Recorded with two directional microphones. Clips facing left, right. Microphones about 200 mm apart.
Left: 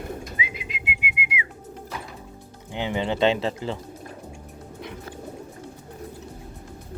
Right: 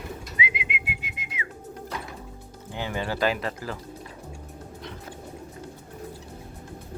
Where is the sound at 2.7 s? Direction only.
20° left (ahead or behind).